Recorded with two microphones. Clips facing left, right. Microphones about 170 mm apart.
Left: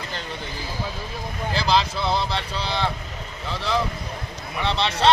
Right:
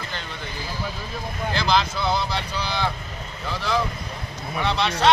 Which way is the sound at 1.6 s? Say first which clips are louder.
Left 1 dB; 30° left (ahead or behind).